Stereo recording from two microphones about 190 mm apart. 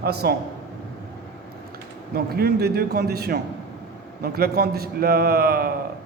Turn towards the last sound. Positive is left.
turn(degrees=-50)  # may be behind; listen again after turning